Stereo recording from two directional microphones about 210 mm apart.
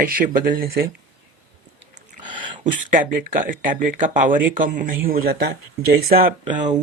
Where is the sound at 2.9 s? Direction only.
40° right (ahead or behind).